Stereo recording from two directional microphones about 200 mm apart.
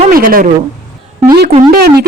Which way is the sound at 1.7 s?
50° right (ahead or behind).